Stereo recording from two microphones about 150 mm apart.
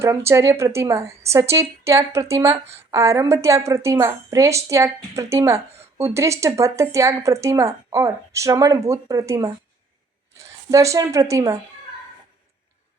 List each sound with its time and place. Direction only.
0.3 s a woman's voice: 20° right (ahead or behind)